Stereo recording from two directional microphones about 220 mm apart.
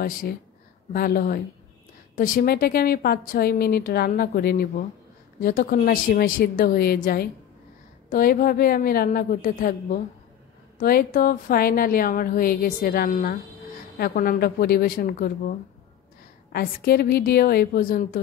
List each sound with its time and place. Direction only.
0.9 s a woman's voice: 45° left (ahead or behind)
16.5 s speech: 45° left (ahead or behind)